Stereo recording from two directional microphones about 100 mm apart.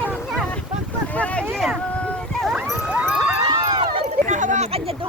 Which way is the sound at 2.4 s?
5° right (ahead or behind).